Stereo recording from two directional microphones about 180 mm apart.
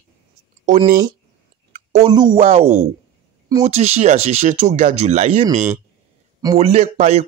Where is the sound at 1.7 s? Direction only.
40° right (ahead or behind).